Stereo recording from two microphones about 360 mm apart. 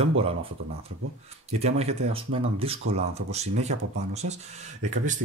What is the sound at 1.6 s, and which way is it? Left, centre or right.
Speech, centre.